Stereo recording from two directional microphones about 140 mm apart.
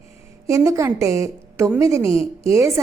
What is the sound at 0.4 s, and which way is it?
A woman's voice, 20° right (ahead or behind).